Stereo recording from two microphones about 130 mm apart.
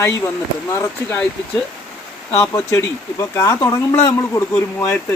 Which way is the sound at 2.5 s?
20° left (ahead or behind).